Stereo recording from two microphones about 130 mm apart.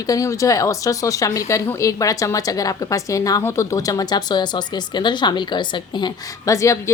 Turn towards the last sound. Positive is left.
turn(degrees=25)  # may be behind; listen again after turning